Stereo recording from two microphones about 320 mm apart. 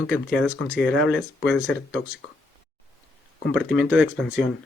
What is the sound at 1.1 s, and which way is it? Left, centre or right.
Speech, centre.